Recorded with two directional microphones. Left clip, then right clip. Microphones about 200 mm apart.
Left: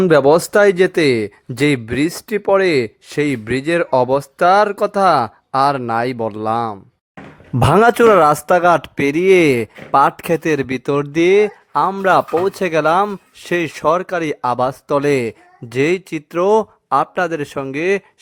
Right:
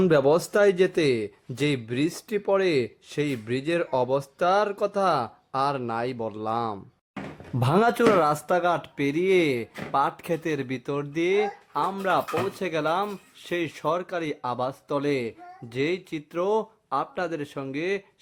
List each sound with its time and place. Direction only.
0.0 s speech: 50° left (ahead or behind)
7.6 s speech: 50° left (ahead or behind)